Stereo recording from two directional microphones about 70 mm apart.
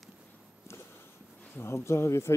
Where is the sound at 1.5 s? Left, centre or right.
Left.